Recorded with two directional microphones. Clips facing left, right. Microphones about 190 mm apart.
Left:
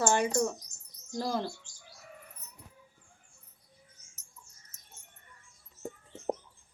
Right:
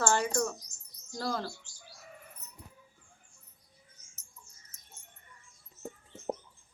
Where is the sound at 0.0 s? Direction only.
20° left (ahead or behind).